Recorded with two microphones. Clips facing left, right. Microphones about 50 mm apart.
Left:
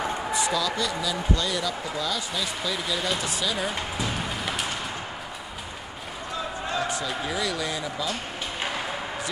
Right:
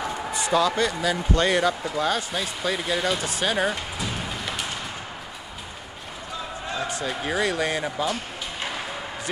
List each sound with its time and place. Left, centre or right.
0.3 s speech: right
4.3 s a sound: centre
7.2 s speech: right